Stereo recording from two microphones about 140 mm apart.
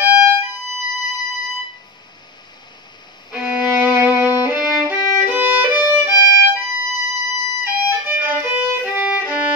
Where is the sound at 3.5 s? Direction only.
10° right (ahead or behind).